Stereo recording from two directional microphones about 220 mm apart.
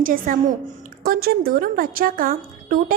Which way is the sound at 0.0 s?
40° right (ahead or behind).